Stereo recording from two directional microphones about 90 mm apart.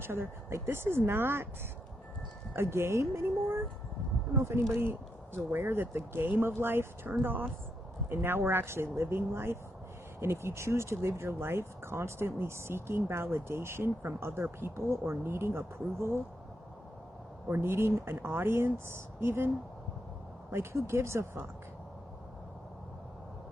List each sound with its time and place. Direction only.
0.0 s speech: 25° right (ahead or behind)
2.5 s speech: 30° right (ahead or behind)
4.4 s speech: 30° right (ahead or behind)
17.5 s speech: 25° right (ahead or behind)
20.5 s speech: 30° right (ahead or behind)